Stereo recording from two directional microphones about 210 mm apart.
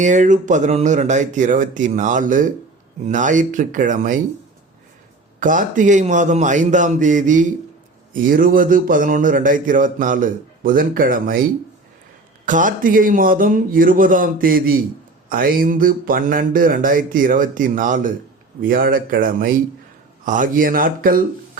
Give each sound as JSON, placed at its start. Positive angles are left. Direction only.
{"t": 0.0, "sound": "a man's voice", "side_deg": -35}
{"t": 5.4, "sound": "a man's voice", "side_deg": -40}
{"t": 12.5, "sound": "a man's voice", "side_deg": -40}